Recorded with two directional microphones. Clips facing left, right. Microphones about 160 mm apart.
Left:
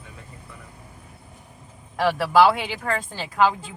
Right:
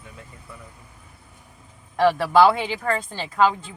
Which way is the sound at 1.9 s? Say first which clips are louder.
Right 1 dB; 5° left (ahead or behind).